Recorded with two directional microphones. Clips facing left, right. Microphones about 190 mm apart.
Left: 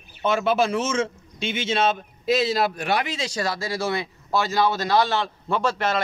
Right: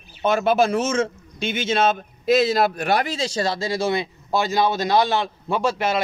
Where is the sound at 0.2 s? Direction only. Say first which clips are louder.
Right 3 dB; 45° right (ahead or behind).